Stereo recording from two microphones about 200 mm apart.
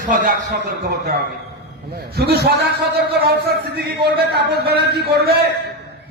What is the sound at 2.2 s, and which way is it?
A man's voice, 55° right (ahead or behind).